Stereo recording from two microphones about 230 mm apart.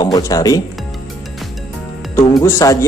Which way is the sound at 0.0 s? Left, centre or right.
Centre.